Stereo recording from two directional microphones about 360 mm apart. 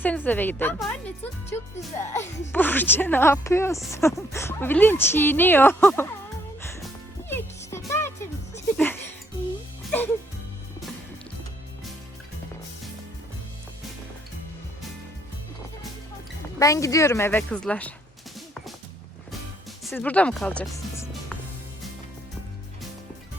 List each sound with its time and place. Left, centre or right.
0.0 s speech: centre
6.6 s music: centre
16.6 s a woman's voice: centre
18.3 s music: centre
19.8 s speech: centre